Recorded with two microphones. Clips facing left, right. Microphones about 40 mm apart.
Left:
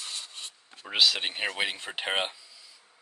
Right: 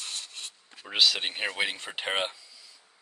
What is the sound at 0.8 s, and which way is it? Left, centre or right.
Speech, centre.